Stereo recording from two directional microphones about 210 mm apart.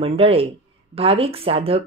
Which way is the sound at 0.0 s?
25° right (ahead or behind).